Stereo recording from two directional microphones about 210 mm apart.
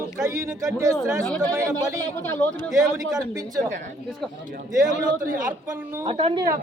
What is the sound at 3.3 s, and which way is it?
Speech, 20° right (ahead or behind).